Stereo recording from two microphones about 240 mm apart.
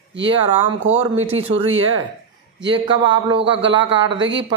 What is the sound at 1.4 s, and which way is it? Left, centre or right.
Speech, right.